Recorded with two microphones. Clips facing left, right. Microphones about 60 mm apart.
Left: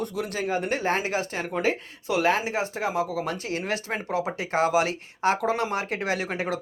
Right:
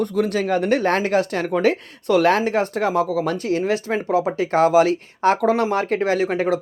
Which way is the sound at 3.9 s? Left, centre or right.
Centre.